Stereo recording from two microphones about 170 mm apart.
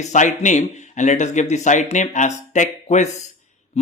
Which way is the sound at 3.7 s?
40° left (ahead or behind).